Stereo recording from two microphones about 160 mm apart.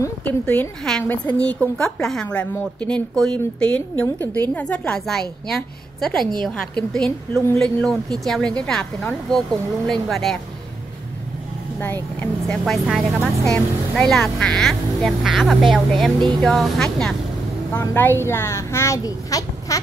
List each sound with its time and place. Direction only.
0.0 s a woman's voice: 10° left (ahead or behind)
11.8 s a woman's voice: 10° left (ahead or behind)
12.8 s speech: 5° right (ahead or behind)
17.7 s a woman's voice: 10° left (ahead or behind)